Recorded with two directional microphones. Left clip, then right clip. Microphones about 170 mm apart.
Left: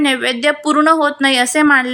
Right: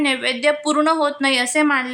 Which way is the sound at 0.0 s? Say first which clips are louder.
Left 4 dB; 20° left (ahead or behind).